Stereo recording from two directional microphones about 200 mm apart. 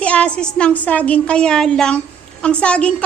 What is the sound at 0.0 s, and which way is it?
A woman's voice, 5° left (ahead or behind).